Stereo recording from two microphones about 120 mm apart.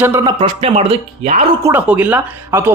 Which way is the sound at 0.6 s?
55° right (ahead or behind).